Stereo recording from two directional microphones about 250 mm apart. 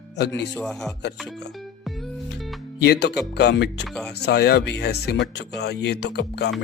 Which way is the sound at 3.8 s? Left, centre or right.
Centre.